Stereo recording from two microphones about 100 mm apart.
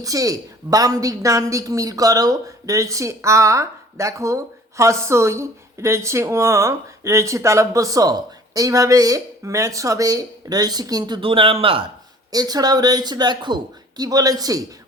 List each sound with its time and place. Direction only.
0.0 s a woman's voice: 35° right (ahead or behind)
11.2 s speech: 65° right (ahead or behind)
12.3 s a woman's voice: 40° right (ahead or behind)